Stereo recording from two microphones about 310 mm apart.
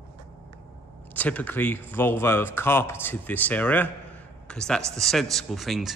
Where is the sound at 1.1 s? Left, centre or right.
Centre.